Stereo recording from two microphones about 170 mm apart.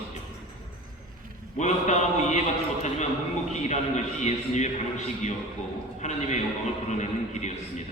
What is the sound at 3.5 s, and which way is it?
A man's voice, 45° left (ahead or behind).